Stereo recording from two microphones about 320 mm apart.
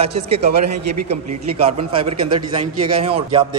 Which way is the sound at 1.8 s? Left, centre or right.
Centre.